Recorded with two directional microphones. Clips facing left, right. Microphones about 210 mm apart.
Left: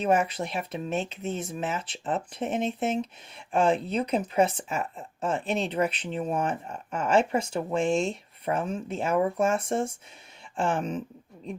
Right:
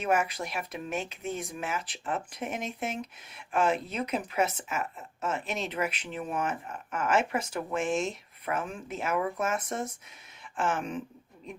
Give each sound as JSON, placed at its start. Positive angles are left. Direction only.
{"t": 0.0, "sound": "speech", "side_deg": 30}